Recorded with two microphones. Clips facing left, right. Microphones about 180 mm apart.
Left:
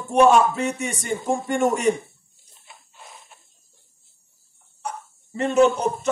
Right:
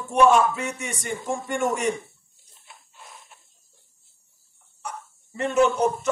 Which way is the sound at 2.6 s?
10° left (ahead or behind).